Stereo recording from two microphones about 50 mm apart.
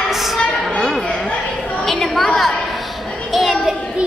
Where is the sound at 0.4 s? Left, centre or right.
Centre.